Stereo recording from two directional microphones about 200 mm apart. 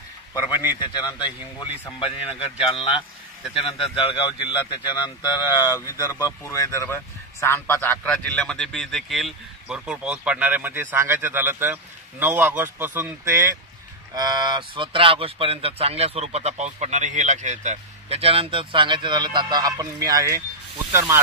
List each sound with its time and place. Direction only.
0.3 s a man's voice: 20° left (ahead or behind); by 20.4 s 15° right (ahead or behind)